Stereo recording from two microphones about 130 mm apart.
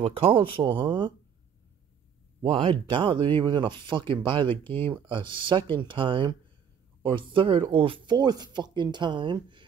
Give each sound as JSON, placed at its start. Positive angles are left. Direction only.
{"t": 0.0, "sound": "speech", "side_deg": -45}
{"t": 2.4, "sound": "speech", "side_deg": -40}